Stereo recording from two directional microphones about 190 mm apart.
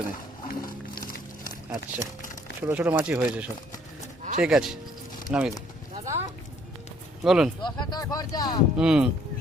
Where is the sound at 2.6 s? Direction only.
10° right (ahead or behind).